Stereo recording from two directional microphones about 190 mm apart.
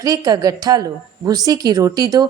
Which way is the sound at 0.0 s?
20° right (ahead or behind).